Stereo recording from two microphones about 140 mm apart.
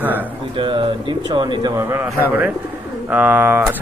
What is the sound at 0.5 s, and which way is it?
Speech, 40° right (ahead or behind).